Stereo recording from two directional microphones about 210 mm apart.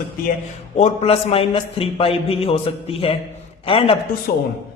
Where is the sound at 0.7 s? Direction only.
30° left (ahead or behind).